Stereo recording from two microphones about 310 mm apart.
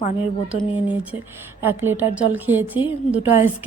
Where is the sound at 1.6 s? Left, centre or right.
Centre.